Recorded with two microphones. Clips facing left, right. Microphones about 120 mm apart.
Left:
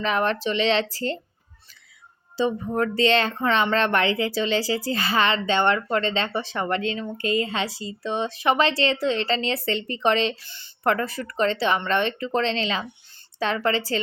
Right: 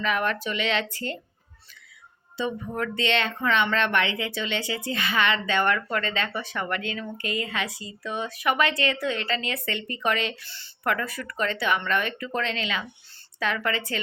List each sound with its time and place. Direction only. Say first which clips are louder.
0.0 s speech: left 3 dB; 30° left (ahead or behind)
2.4 s speech: left 6 dB; 35° left (ahead or behind)